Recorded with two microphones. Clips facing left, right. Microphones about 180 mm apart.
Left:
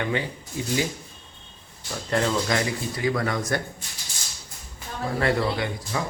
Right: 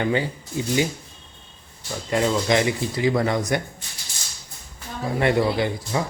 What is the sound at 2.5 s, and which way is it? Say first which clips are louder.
Speech: right 5 dB; 20° right (ahead or behind).